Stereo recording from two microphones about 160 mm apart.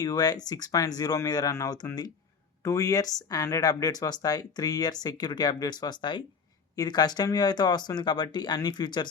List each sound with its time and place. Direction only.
0.0 s speech: 25° left (ahead or behind)